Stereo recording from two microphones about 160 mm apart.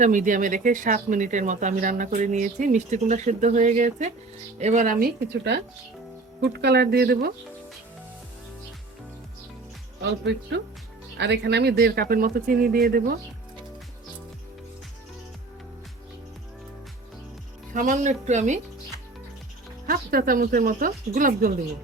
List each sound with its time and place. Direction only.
0.0 s speech: 55° right (ahead or behind); by 7.3 s 85° right
10.0 s speech: 90° right; by 13.1 s 65° right (ahead or behind)
17.7 s speech: 50° right (ahead or behind)
19.9 s speech: 65° right (ahead or behind)